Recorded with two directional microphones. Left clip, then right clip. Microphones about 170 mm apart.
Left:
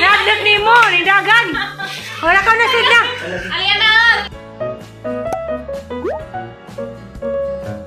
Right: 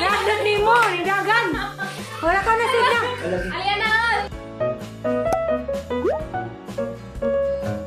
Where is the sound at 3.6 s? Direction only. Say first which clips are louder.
Left 9 dB; 65° right (ahead or behind).